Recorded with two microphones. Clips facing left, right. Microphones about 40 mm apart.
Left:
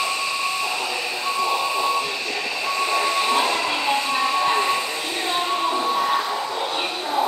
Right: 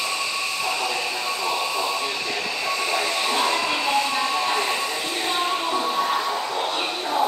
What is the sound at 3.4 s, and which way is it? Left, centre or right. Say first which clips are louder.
Music: left 1 dB; centre.